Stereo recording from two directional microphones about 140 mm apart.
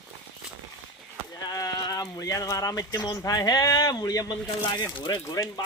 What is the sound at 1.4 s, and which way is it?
Speech, 25° left (ahead or behind).